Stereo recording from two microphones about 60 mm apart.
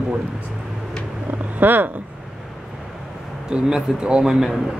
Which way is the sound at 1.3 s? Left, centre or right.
Right.